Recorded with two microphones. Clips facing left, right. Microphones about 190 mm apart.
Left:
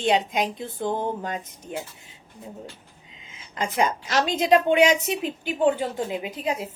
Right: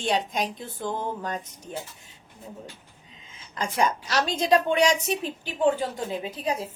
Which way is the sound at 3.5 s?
20° left (ahead or behind).